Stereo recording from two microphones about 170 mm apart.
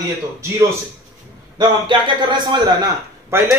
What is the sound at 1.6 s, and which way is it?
A man's voice, 25° right (ahead or behind).